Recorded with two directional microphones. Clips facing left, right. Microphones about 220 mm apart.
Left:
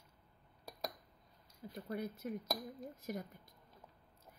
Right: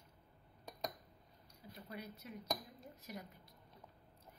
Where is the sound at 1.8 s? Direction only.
50° left (ahead or behind).